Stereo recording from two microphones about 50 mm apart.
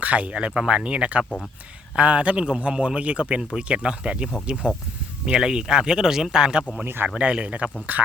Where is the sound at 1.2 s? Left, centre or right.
Left.